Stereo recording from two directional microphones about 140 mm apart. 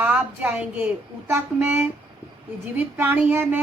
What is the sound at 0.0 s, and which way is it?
A woman's voice, 10° right (ahead or behind).